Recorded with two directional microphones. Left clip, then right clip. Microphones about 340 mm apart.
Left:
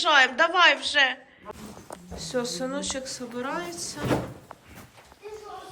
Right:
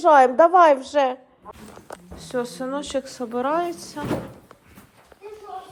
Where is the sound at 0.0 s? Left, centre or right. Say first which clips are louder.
Right 6 dB; centre.